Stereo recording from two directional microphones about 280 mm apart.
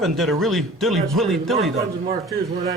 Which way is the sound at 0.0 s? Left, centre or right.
Centre.